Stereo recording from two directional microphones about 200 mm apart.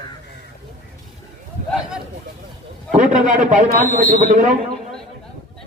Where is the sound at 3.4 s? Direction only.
40° right (ahead or behind).